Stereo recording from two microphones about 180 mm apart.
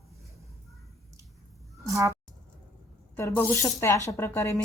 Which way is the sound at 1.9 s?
20° right (ahead or behind).